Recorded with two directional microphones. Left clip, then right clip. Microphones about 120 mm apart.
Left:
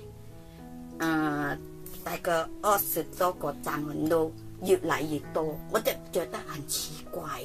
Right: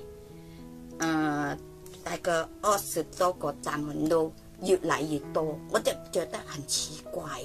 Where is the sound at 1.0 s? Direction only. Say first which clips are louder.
Even; 25° right (ahead or behind).